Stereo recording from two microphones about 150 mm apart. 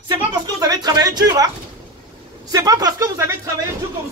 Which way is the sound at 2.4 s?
25° right (ahead or behind).